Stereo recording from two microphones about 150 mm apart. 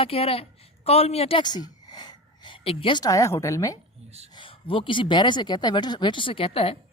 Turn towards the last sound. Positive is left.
turn(degrees=40)  # may be behind; listen again after turning